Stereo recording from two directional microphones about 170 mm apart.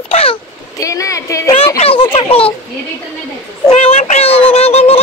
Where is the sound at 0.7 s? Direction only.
20° left (ahead or behind).